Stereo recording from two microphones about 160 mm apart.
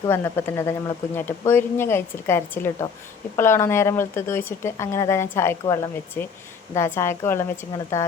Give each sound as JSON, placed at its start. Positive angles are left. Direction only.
{"t": 0.1, "sound": "a woman's voice", "side_deg": 15}